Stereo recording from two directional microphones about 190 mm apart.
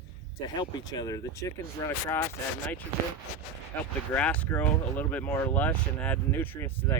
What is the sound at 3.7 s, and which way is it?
Speech, 10° left (ahead or behind).